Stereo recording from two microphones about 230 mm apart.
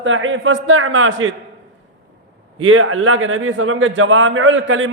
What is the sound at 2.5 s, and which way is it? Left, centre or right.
A man's voice, right.